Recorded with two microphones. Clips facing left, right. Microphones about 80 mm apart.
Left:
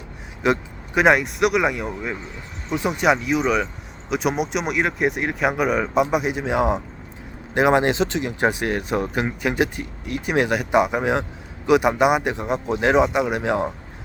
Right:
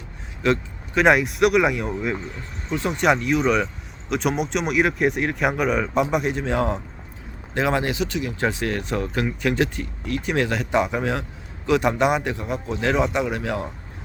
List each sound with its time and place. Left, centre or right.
0.4 s vehicle: centre
1.0 s speech: centre
2.6 s speech: centre